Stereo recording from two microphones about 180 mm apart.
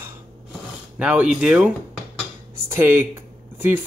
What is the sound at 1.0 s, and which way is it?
Speech, 5° right (ahead or behind).